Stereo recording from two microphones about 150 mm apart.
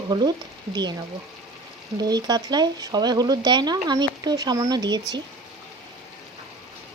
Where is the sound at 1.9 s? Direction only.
25° right (ahead or behind).